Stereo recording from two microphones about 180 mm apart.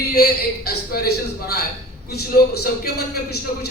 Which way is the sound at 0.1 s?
60° left (ahead or behind).